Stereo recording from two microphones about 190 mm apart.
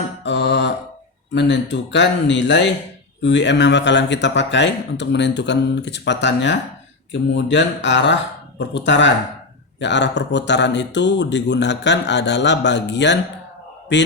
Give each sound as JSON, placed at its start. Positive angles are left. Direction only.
{"t": 0.2, "sound": "mantra", "side_deg": 70}
{"t": 1.3, "sound": "speech", "side_deg": 70}